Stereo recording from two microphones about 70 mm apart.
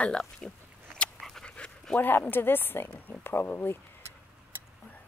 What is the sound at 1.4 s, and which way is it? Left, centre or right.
Dog, centre.